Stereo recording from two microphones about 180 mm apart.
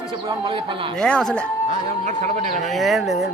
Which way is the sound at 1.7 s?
40° right (ahead or behind).